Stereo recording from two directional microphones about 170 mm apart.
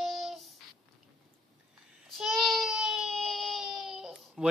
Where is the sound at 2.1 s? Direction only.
Centre (ahead or behind).